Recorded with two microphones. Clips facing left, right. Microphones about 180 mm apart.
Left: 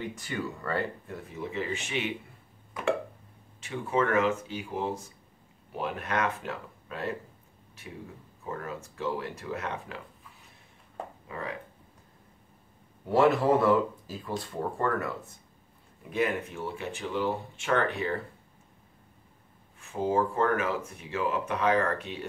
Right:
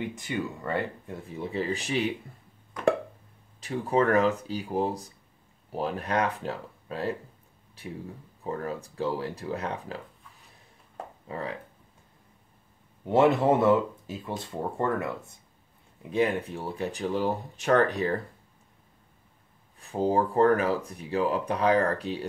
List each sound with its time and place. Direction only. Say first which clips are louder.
0.2 s speech: right 2 dB; 20° right (ahead or behind)
1.4 s speech: right 3 dB; 35° right (ahead or behind)
3.6 s speech: right 4 dB; 35° right (ahead or behind)
11.2 s speech: right 4 dB; 30° right (ahead or behind)
13.1 s speech: right 1 dB; 20° right (ahead or behind)
16.1 s speech: right 3 dB; 35° right (ahead or behind)
19.8 s speech: right 2 dB; 35° right (ahead or behind)